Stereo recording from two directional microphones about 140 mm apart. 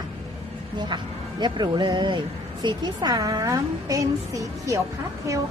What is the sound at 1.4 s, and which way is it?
Speech, 30° right (ahead or behind).